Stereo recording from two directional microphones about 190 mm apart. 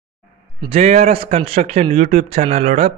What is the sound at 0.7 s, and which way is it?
A man's voice, 35° right (ahead or behind).